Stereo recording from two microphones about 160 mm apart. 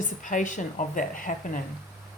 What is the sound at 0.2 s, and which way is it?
A woman's voice, 55° left (ahead or behind).